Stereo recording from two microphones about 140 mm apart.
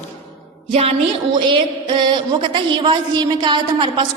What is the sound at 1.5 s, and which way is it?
A woman's voice, 35° right (ahead or behind).